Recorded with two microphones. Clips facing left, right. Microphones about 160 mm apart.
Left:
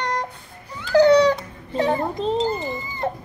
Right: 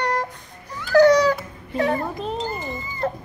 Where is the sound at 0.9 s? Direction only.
20° left (ahead or behind).